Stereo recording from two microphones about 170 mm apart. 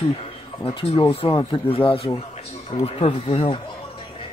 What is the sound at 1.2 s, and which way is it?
Speech, 30° left (ahead or behind).